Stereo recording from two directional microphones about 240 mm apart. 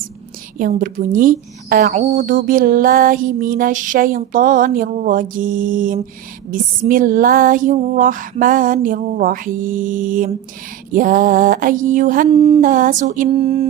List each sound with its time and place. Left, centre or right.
0.6 s a woman's voice: right